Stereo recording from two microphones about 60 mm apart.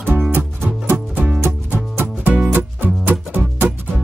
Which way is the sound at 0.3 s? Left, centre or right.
Right.